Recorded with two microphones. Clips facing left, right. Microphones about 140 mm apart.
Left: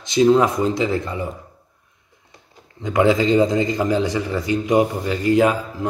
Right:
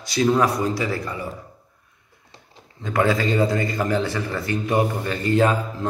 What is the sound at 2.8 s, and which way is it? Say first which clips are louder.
A man's voice: left 4 dB; 20° left (ahead or behind).